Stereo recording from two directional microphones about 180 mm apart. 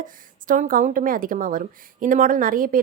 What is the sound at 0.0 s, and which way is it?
Speech, 50° right (ahead or behind).